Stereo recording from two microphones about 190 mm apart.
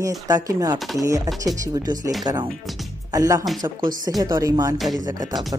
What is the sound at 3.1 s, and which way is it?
Speech, 20° right (ahead or behind).